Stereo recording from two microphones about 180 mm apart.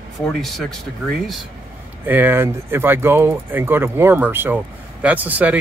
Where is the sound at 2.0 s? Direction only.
10° right (ahead or behind).